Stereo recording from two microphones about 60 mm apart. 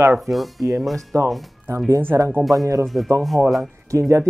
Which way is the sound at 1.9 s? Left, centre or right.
Right.